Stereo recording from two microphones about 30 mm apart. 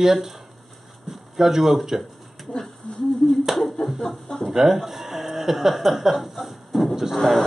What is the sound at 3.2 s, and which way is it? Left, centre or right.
Finger snapping, centre.